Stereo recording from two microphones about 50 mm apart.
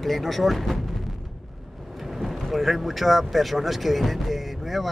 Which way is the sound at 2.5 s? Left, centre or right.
Centre.